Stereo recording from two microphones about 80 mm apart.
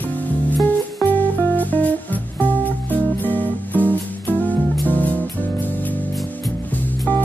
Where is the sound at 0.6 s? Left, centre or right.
Left.